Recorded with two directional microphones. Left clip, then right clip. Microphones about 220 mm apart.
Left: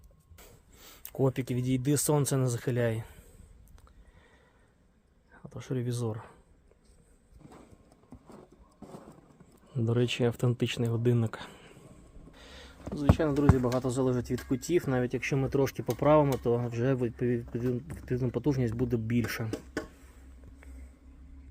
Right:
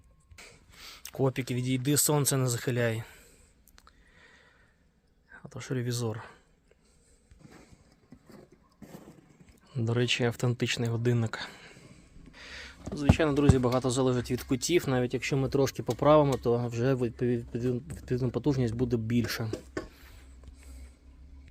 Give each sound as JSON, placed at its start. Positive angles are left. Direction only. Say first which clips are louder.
{"t": 0.3, "sound": "speech", "louder": "right 6 dB", "side_deg": 5}
{"t": 3.8, "sound": "a sound", "louder": "right 5 dB", "side_deg": 5}
{"t": 5.3, "sound": "speech", "louder": "right 1 dB", "side_deg": 5}
{"t": 9.6, "sound": "speech", "louder": "right 1 dB", "side_deg": 10}
{"t": 12.3, "sound": "a sound", "louder": "right 6 dB", "side_deg": 5}
{"t": 12.9, "sound": "speech", "louder": "right 1 dB", "side_deg": 0}
{"t": 13.6, "sound": "speech", "louder": "right 2 dB", "side_deg": -20}
{"t": 13.9, "sound": "speech", "louder": "right 2 dB", "side_deg": -5}
{"t": 14.3, "sound": "speech", "louder": "right 2 dB", "side_deg": -15}
{"t": 14.8, "sound": "speech", "louder": "left 1 dB", "side_deg": -5}